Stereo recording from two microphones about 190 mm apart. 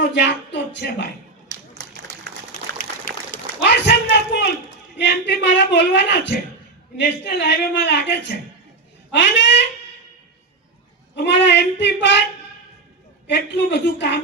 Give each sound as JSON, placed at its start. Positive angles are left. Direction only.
{"t": 0.0, "sound": "speech", "side_deg": 65}
{"t": 1.5, "sound": "a sound", "side_deg": -60}
{"t": 2.7, "sound": "a sound", "side_deg": 45}
{"t": 4.9, "sound": "speech", "side_deg": 65}
{"t": 9.1, "sound": "speech", "side_deg": 65}
{"t": 11.1, "sound": "speech", "side_deg": 65}
{"t": 13.2, "sound": "speech", "side_deg": 65}